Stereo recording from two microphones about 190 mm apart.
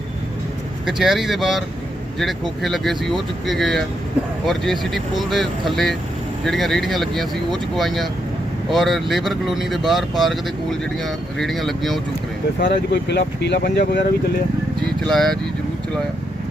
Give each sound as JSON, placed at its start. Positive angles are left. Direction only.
{"t": 0.9, "sound": "speech", "side_deg": 0}
{"t": 12.6, "sound": "speech", "side_deg": 60}
{"t": 14.8, "sound": "speech", "side_deg": 0}